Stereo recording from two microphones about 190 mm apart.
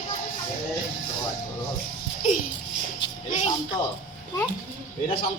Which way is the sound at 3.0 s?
70° left (ahead or behind).